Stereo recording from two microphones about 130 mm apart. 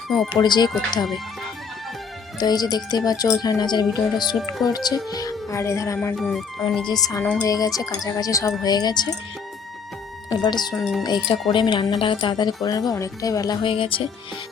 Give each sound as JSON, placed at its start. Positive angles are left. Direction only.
{"t": 0.3, "sound": "speech", "side_deg": 35}
{"t": 0.7, "sound": "speech", "side_deg": 5}
{"t": 2.4, "sound": "speech", "side_deg": 30}
{"t": 6.1, "sound": "speech", "side_deg": 0}
{"t": 6.8, "sound": "speech", "side_deg": 30}
{"t": 10.2, "sound": "speech", "side_deg": 35}
{"t": 10.8, "sound": "speech", "side_deg": 0}
{"t": 11.0, "sound": "speech", "side_deg": 35}
{"t": 13.6, "sound": "speech", "side_deg": 40}